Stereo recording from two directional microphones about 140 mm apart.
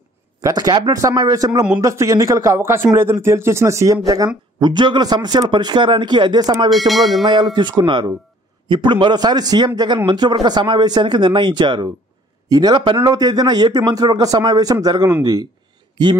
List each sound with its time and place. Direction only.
0.4 s a man's voice: 25° right (ahead or behind)
6.9 s a sound: centre (ahead or behind)
7.5 s a man's voice: 30° right (ahead or behind)